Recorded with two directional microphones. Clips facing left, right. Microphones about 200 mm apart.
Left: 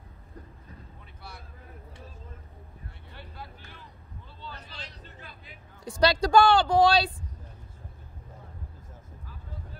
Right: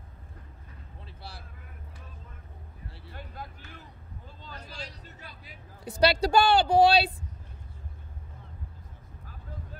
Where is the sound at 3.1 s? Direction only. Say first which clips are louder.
Right 2 dB; 45° right (ahead or behind).